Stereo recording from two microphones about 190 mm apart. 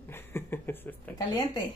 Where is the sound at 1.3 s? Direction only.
20° left (ahead or behind).